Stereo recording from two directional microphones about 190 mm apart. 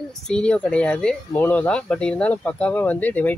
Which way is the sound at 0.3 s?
5° left (ahead or behind).